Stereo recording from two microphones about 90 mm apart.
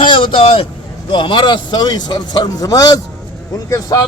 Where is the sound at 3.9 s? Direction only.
45° left (ahead or behind).